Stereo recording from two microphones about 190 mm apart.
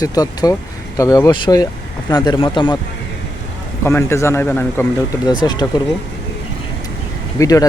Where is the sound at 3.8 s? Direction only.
15° left (ahead or behind).